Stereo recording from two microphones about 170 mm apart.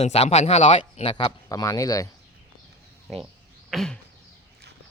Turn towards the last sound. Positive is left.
turn(degrees=0)  # may be behind; listen again after turning